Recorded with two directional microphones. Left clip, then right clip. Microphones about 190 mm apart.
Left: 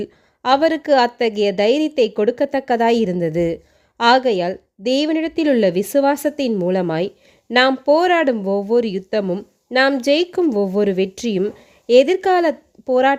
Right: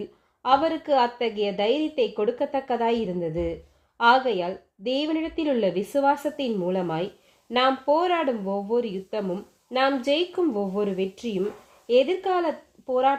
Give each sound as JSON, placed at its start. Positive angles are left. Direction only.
{"t": 0.0, "sound": "a woman's voice", "side_deg": 35}